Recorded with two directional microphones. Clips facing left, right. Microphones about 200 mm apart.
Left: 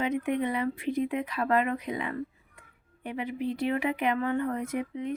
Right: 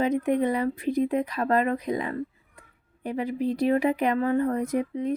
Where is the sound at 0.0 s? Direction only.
40° right (ahead or behind).